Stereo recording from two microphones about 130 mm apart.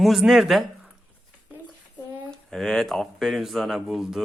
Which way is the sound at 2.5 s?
5° left (ahead or behind).